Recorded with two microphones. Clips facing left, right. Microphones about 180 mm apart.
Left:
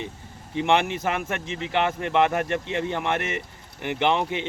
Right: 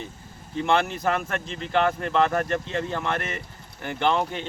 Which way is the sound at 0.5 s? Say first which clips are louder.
Left 1 dB; 15° left (ahead or behind).